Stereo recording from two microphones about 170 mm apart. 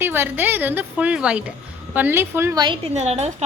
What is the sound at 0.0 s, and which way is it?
A woman's voice, 15° right (ahead or behind).